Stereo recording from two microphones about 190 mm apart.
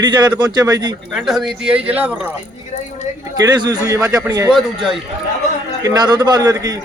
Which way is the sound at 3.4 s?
20° right (ahead or behind).